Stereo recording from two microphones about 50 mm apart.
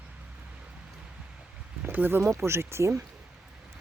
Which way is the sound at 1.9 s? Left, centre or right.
Right.